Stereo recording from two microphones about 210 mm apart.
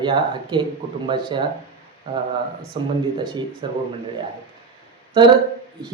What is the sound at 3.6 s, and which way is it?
Speech, 20° right (ahead or behind).